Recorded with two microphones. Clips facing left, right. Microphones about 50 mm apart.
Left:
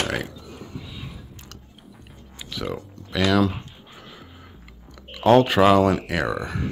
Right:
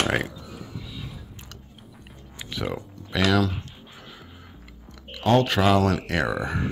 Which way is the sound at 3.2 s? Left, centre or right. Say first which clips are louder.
Left 2 dB; centre.